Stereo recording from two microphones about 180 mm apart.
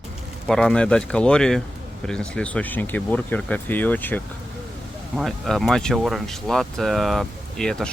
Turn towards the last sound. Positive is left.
turn(degrees=5)  # may be behind; listen again after turning